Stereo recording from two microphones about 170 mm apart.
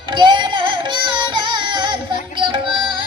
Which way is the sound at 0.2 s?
30° right (ahead or behind).